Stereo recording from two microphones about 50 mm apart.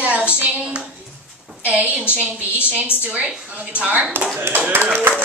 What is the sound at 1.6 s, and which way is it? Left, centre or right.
Speech, right.